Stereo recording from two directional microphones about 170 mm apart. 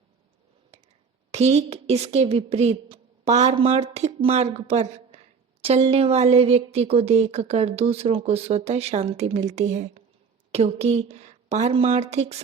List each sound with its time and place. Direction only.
1.3 s speech: 40° right (ahead or behind)